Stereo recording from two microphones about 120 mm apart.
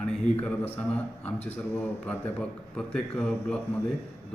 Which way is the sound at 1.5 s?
15° left (ahead or behind).